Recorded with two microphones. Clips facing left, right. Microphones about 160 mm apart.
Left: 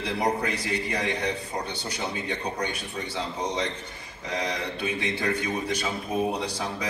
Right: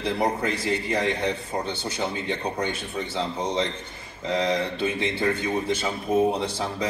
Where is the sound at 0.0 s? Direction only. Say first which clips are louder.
Right 2 dB; 25° right (ahead or behind).